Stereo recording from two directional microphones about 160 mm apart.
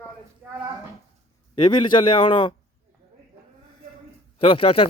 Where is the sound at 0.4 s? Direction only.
10° right (ahead or behind).